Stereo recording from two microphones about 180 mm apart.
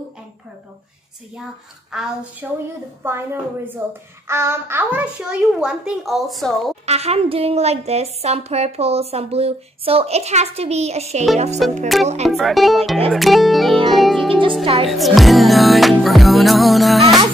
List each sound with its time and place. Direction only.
1.9 s a woman's voice: centre (ahead or behind)
3.8 s a child's voice: 10° right (ahead or behind)
6.9 s a woman's voice: 35° right (ahead or behind)
11.9 s a woman's voice: centre (ahead or behind)
13.8 s music: centre (ahead or behind)
14.3 s speech: 30° right (ahead or behind)
14.9 s music: centre (ahead or behind)